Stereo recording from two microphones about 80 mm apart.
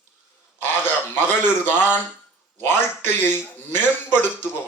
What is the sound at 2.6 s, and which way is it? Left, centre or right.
A man's voice, left.